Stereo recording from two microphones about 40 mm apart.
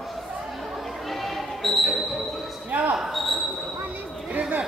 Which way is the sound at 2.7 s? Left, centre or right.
Right.